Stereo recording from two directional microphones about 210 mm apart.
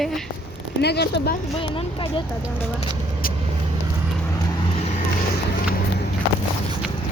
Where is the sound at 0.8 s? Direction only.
50° left (ahead or behind).